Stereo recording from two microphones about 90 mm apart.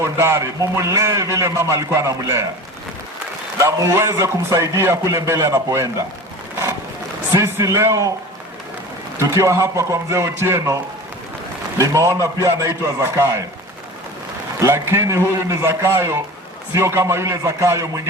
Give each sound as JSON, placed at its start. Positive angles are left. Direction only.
{"t": 0.0, "sound": "a man's voice", "side_deg": -30}
{"t": 3.6, "sound": "a man's voice", "side_deg": -35}
{"t": 7.3, "sound": "a man's voice", "side_deg": -35}
{"t": 9.3, "sound": "a man's voice", "side_deg": -35}
{"t": 11.8, "sound": "a man's voice", "side_deg": -35}
{"t": 14.6, "sound": "a man's voice", "side_deg": -30}